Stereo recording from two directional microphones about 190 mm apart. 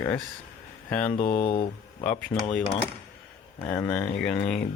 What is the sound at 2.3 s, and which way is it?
Speech, 15° left (ahead or behind).